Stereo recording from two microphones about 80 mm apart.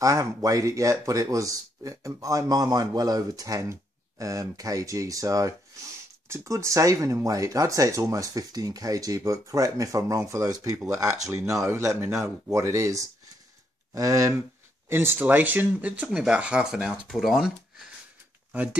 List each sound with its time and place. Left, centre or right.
0.0 s speech: right
14.9 s speech: right; by 17.8 s centre
18.5 s speech: centre